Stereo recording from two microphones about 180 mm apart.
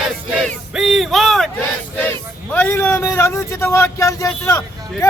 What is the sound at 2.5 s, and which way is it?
A man's voice, 10° left (ahead or behind).